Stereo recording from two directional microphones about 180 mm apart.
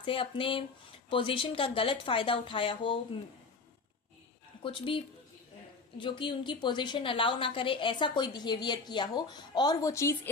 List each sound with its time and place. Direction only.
0.0 s a woman's voice: 30° left (ahead or behind)
4.6 s a woman's voice: 30° left (ahead or behind)